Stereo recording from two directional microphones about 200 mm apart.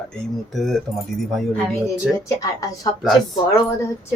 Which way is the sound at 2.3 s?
15° left (ahead or behind).